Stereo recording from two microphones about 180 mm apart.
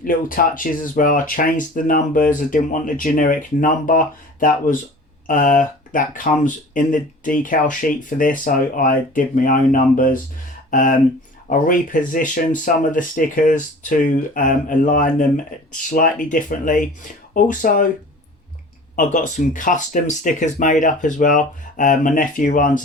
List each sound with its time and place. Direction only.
0.0 s speech: 50° left (ahead or behind)
18.9 s speech: 45° left (ahead or behind)